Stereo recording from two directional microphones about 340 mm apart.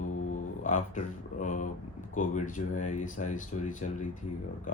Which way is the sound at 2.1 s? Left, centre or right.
Left.